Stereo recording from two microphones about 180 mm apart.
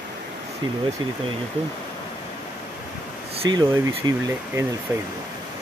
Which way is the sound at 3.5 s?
20° right (ahead or behind).